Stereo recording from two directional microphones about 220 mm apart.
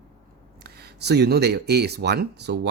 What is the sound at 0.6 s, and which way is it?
Speech, 50° right (ahead or behind).